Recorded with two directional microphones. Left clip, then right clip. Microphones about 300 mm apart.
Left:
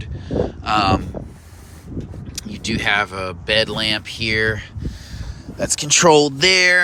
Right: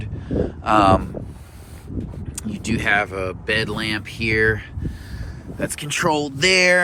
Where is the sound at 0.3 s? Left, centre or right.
Centre.